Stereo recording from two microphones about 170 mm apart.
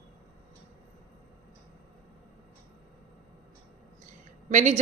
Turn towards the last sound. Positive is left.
turn(degrees=-45)  # may be behind; listen again after turning